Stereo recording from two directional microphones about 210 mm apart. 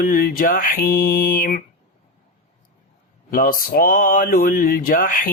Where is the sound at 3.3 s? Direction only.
40° left (ahead or behind).